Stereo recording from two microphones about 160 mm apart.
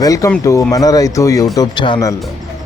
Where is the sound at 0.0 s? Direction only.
20° left (ahead or behind).